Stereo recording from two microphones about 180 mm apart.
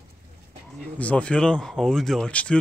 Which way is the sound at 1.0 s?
5° left (ahead or behind).